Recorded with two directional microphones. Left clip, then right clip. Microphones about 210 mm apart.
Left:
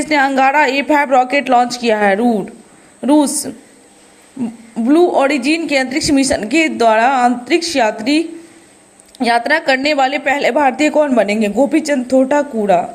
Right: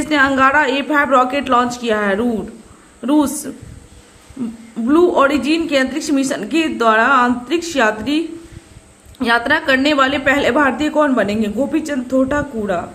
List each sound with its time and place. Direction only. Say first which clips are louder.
0.0 s a woman's voice: left 1 dB; 20° left (ahead or behind)
4.9 s a woman's voice: left 1 dB; 15° left (ahead or behind)